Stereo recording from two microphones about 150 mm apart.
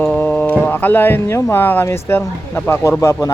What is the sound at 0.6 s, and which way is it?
Speech, 10° left (ahead or behind).